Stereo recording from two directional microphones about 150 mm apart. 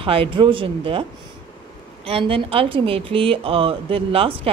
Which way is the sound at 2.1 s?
40° right (ahead or behind).